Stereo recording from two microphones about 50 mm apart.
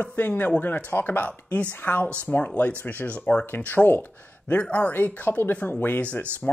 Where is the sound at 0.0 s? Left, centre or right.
Left.